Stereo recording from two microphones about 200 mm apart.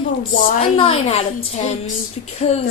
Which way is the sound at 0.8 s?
30° left (ahead or behind).